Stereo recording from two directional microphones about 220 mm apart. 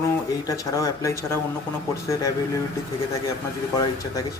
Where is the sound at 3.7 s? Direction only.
15° left (ahead or behind).